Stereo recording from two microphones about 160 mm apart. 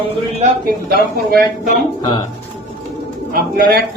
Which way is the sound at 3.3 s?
65° right (ahead or behind).